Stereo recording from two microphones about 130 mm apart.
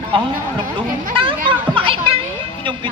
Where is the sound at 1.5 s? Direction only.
40° right (ahead or behind).